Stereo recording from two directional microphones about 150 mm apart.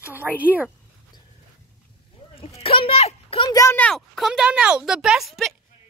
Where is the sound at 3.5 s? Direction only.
20° left (ahead or behind).